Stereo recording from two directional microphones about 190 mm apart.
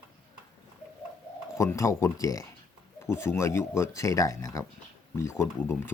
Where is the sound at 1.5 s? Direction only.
15° left (ahead or behind).